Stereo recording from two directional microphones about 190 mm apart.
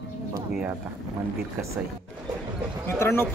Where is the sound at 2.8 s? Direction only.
15° left (ahead or behind).